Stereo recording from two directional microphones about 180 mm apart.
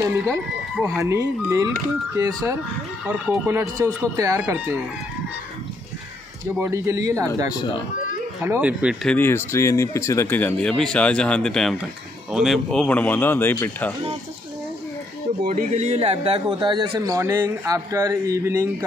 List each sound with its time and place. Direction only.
0.8 s speech: 15° right (ahead or behind)
6.6 s speech: 15° right (ahead or behind)
8.4 s speech: 10° right (ahead or behind)
9.0 s speech: 10° left (ahead or behind)
15.4 s speech: 45° right (ahead or behind); by 18.9 s 15° right (ahead or behind)